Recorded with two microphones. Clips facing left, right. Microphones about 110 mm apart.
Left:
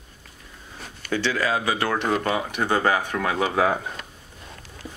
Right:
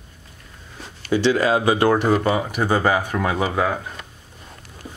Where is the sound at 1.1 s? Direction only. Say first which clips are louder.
Right 6 dB; 20° right (ahead or behind).